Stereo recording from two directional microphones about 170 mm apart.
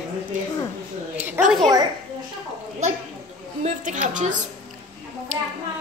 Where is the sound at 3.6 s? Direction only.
45° right (ahead or behind).